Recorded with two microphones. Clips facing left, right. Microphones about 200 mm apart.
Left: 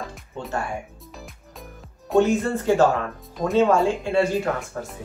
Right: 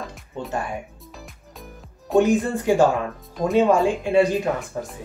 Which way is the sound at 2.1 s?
15° right (ahead or behind).